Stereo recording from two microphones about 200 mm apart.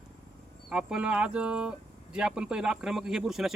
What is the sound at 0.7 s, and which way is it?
Speech, 5° right (ahead or behind).